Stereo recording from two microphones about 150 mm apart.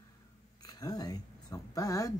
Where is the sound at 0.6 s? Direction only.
25° left (ahead or behind).